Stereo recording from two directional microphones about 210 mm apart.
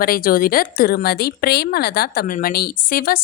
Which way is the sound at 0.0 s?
45° left (ahead or behind).